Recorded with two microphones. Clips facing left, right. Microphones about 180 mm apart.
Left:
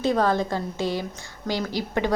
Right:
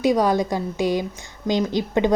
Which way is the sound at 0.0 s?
15° right (ahead or behind).